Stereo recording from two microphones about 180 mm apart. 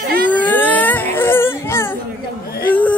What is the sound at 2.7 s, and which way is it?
Whimper, 10° left (ahead or behind).